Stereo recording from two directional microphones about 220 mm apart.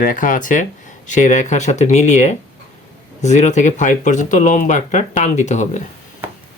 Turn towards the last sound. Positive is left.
turn(degrees=35)  # may be behind; listen again after turning